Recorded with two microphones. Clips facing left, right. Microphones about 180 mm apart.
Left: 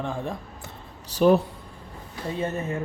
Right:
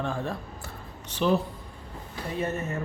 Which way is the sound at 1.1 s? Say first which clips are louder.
Left 7 dB; 40° left (ahead or behind).